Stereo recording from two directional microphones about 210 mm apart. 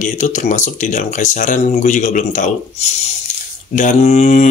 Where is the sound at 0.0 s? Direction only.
35° left (ahead or behind).